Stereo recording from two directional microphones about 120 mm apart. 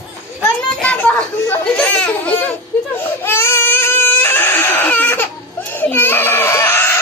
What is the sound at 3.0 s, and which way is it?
Baby cry, 20° left (ahead or behind).